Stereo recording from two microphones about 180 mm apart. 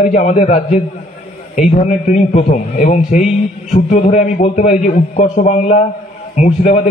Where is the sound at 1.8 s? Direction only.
40° left (ahead or behind).